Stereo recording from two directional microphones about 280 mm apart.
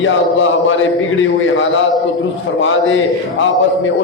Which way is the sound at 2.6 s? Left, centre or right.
Left.